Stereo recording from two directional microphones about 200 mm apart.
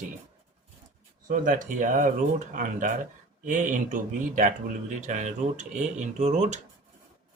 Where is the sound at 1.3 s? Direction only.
40° right (ahead or behind).